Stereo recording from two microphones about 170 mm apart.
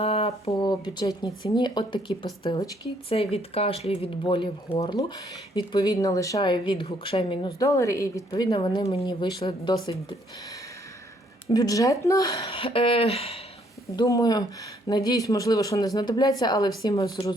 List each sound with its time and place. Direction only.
0.0 s a sound: 35° left (ahead or behind)
0.5 s a woman's voice: 25° left (ahead or behind)
3.1 s a woman's voice: 35° left (ahead or behind)
7.6 s a woman's voice: 20° left (ahead or behind)
11.4 s a woman's voice: 20° left (ahead or behind)
12.5 s speech: 35° left (ahead or behind)
13.9 s a woman's voice: 25° left (ahead or behind)